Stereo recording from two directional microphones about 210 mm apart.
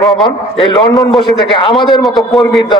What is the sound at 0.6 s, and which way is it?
Speech, 20° left (ahead or behind).